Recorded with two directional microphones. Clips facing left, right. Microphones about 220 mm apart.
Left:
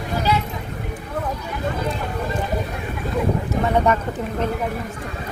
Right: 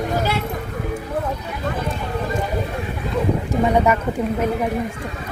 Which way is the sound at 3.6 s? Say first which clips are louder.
Right 2 dB; 10° right (ahead or behind).